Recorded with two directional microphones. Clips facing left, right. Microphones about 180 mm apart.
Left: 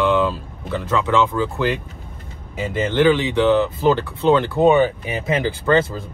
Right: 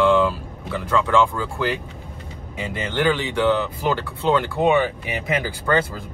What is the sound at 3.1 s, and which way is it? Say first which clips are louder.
Speech: left 2 dB; 20° left (ahead or behind).